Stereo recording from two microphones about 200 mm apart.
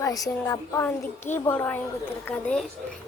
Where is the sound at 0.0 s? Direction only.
15° left (ahead or behind).